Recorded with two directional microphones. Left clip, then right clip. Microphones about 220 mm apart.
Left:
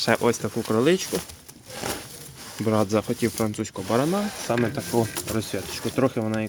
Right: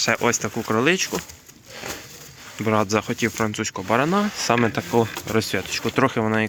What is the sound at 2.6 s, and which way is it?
Speech, centre (ahead or behind).